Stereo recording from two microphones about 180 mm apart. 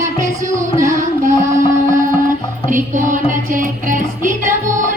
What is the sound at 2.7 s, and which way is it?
Music, 45° right (ahead or behind).